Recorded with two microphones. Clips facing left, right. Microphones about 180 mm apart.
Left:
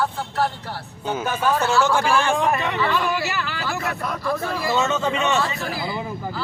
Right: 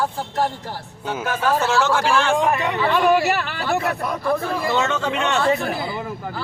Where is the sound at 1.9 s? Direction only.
10° left (ahead or behind).